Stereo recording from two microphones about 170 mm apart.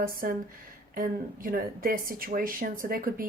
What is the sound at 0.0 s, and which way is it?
A woman's voice, 55° right (ahead or behind).